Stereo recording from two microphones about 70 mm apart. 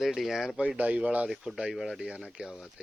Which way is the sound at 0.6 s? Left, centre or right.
Centre.